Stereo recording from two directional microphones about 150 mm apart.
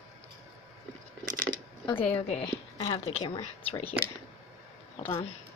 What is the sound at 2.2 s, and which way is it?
A woman's voice, 45° left (ahead or behind).